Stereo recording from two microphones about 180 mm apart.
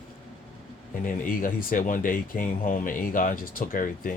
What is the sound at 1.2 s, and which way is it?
Speech, 50° left (ahead or behind).